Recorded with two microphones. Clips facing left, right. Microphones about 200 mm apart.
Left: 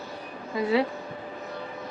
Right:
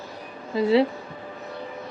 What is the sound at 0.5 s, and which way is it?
Speech, 25° right (ahead or behind).